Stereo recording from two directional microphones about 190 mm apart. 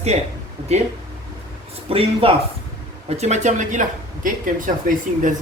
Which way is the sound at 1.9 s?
30° right (ahead or behind).